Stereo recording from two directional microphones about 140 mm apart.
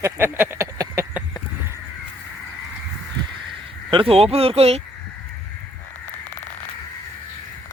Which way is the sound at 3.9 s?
40° right (ahead or behind).